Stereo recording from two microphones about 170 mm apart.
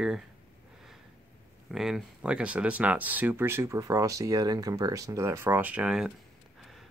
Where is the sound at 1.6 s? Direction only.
Centre (ahead or behind).